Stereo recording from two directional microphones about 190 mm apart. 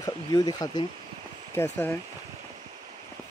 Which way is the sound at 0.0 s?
20° left (ahead or behind).